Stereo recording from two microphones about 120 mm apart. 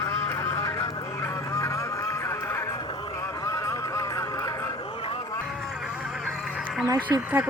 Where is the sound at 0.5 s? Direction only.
25° left (ahead or behind).